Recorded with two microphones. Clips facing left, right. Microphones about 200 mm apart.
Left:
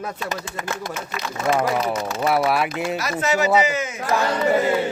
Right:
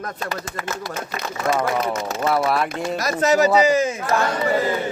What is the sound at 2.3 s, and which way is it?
Speech, 5° left (ahead or behind).